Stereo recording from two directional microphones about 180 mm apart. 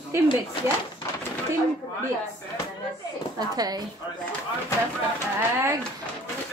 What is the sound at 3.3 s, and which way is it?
Speech, 20° right (ahead or behind).